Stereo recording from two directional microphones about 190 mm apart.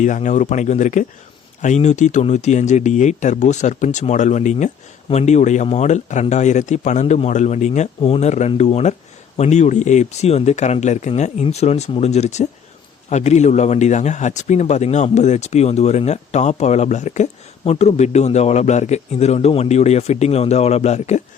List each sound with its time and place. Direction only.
0.0 s a man's voice: 40° left (ahead or behind)